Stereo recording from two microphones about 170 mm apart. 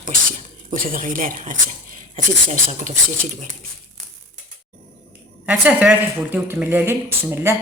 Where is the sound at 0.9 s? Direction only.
55° right (ahead or behind).